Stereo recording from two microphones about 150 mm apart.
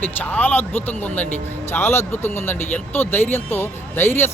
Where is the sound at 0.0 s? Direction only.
10° left (ahead or behind).